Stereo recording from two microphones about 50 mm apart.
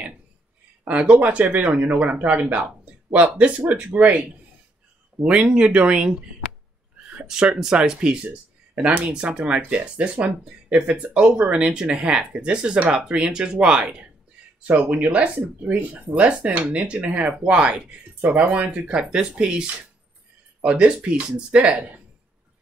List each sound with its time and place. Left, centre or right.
0.8 s speech: right
5.2 s speech: right
7.0 s a sound: right
7.3 s speech: centre
9.1 s speech: centre
9.4 s speech: right
18.9 s speech: centre